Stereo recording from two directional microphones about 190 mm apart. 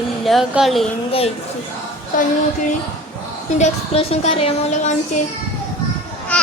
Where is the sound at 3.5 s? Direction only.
35° left (ahead or behind).